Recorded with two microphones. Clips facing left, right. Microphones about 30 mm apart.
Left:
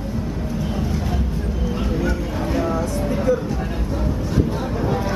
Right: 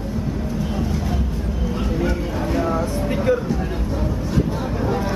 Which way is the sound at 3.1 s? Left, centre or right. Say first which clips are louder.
Right 1 dB; right.